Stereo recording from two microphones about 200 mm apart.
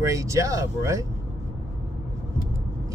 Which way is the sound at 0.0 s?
15° right (ahead or behind).